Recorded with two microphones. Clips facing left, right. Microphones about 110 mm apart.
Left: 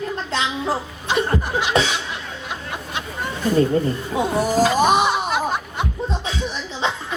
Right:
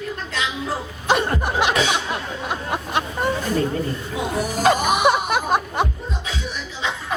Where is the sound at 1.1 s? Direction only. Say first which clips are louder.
Right 1 dB; 60° right (ahead or behind).